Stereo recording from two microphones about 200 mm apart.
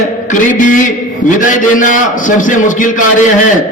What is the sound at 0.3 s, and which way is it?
A man's voice, 40° left (ahead or behind).